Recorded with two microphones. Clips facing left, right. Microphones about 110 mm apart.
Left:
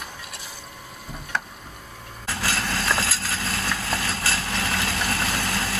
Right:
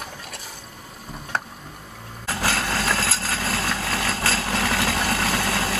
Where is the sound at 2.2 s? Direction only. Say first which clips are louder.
Right 3 dB; 35° right (ahead or behind).